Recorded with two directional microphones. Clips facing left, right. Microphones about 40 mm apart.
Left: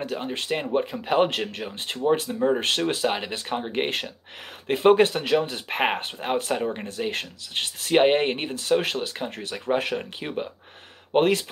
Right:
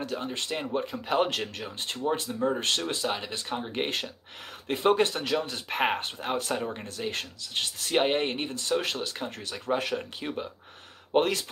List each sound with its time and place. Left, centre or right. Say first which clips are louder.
0.1 s speech: left 4 dB; left
5.0 s speech: left 6 dB; left